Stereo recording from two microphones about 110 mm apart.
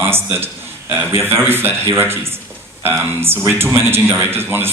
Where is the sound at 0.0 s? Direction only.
20° right (ahead or behind).